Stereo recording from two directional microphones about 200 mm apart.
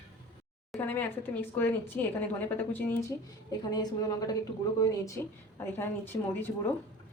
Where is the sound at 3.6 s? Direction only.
20° left (ahead or behind).